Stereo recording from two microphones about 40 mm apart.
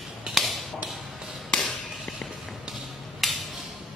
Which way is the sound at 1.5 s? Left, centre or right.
Centre.